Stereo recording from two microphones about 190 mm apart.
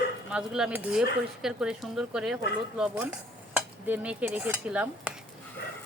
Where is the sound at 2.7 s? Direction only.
5° right (ahead or behind).